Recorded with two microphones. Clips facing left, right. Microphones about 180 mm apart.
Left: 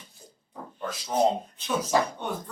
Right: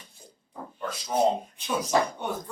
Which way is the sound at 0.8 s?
5° left (ahead or behind).